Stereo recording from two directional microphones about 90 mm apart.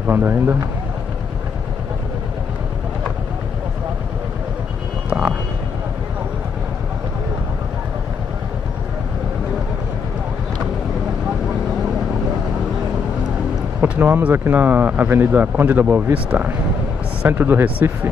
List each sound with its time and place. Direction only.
0.0 s speech: 20° right (ahead or behind)
13.7 s speech: 15° right (ahead or behind)